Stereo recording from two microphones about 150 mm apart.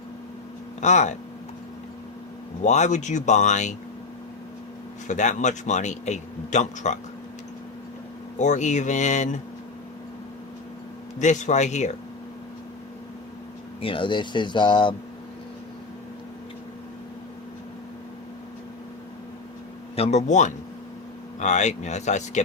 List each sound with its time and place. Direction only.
0.8 s speech: 50° left (ahead or behind)
2.6 s speech: 50° left (ahead or behind)
5.0 s speech: 55° left (ahead or behind)
8.4 s speech: 50° left (ahead or behind)
11.2 s speech: 55° left (ahead or behind)
13.8 s speech: 35° left (ahead or behind)
20.0 s speech: 45° left (ahead or behind)